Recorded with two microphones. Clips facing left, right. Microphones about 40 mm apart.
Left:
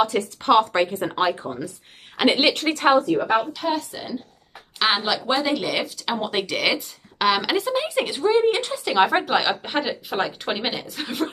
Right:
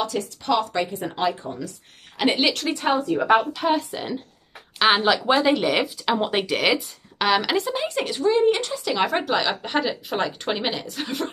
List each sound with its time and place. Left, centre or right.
0.0 s speech: left
2.7 s speech: left
3.7 s a woman's voice: right
4.7 s speech: centre